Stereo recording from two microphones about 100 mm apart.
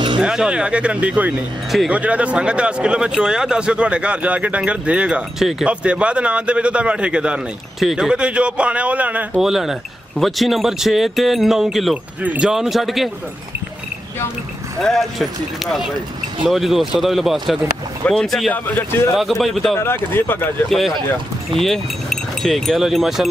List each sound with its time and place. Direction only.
0.2 s speech: 10° right (ahead or behind)
9.4 s speech: 5° right (ahead or behind)
14.8 s speech: centre (ahead or behind)
18.5 s speech: 20° left (ahead or behind)
19.1 s speech: centre (ahead or behind)
19.8 s speech: 20° left (ahead or behind)
21.5 s speech: 5° left (ahead or behind)